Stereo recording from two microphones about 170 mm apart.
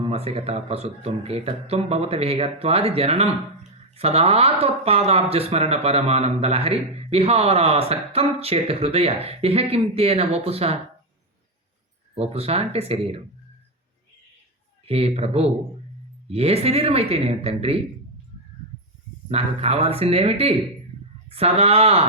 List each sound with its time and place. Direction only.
0.0 s speech: 35° right (ahead or behind)
12.1 s speech: 35° right (ahead or behind)
14.8 s speech: 35° right (ahead or behind)
19.3 s speech: 35° right (ahead or behind)